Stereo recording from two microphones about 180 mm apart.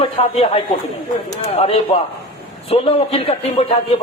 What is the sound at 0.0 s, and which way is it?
A man's voice, 35° left (ahead or behind).